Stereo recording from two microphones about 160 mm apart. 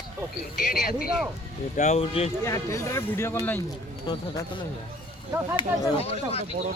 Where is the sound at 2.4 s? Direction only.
20° left (ahead or behind).